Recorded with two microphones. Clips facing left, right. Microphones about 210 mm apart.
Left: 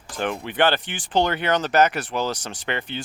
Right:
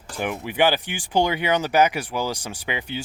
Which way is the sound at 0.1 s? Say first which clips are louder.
Left 1 dB; 10° right (ahead or behind).